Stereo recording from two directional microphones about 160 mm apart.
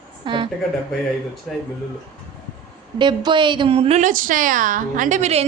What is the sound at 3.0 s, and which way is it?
A woman's voice, 30° right (ahead or behind).